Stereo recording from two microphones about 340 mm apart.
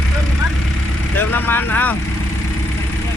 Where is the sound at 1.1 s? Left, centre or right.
Centre.